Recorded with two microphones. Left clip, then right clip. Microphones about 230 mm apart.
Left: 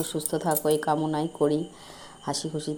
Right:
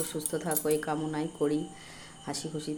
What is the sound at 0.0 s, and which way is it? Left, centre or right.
Speech, left.